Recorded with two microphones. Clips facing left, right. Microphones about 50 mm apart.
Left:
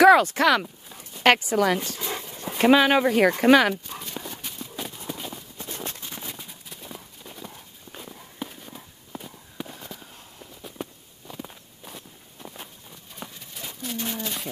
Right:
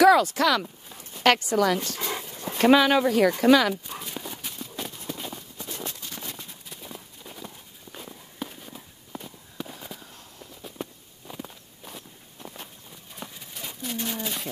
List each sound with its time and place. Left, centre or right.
0.0 s speech: left
1.2 s speech: left
2.2 s speech: centre; by 3.7 s left
3.7 s clip-clop: centre
6.0 s a sound: centre
6.3 s clip-clop: centre
10.8 s a sound: centre
11.4 s walk: centre
13.1 s a sound: centre